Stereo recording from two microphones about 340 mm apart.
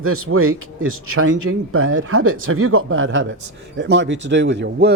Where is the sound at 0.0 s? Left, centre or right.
Right.